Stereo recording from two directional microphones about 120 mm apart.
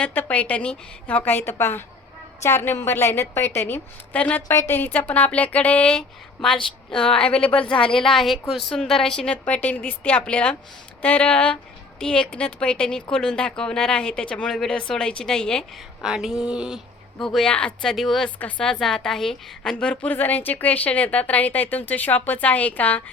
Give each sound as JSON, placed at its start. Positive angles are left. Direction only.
{"t": 0.0, "sound": "a woman's voice", "side_deg": 15}
{"t": 16.0, "sound": "speech", "side_deg": -5}
{"t": 18.3, "sound": "speech", "side_deg": 10}